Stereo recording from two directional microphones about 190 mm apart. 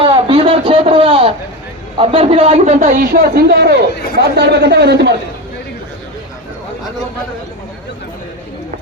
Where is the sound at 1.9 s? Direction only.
30° right (ahead or behind); by 5.1 s 60° right (ahead or behind).